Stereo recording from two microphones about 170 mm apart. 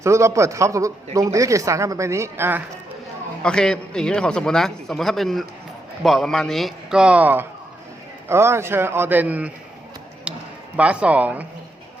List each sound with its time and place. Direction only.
0.0 s speech: 15° right (ahead or behind)
3.4 s a man's voice: 5° left (ahead or behind)
10.3 s a sound: 5° right (ahead or behind)
10.8 s speech: 5° right (ahead or behind)